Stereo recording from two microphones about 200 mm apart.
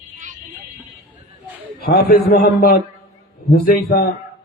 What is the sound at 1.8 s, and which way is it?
A man's voice, 50° left (ahead or behind).